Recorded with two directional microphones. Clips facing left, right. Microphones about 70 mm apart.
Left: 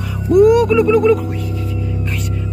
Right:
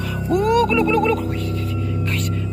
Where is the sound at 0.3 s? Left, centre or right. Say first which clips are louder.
Left 7 dB; centre.